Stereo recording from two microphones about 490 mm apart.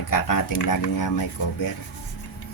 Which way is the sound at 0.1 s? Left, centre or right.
Left.